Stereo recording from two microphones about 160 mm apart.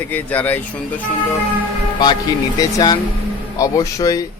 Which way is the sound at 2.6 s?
25° left (ahead or behind).